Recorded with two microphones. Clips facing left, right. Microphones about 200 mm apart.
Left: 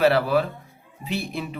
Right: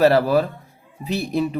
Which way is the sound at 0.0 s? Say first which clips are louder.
Right 4 dB; 40° right (ahead or behind).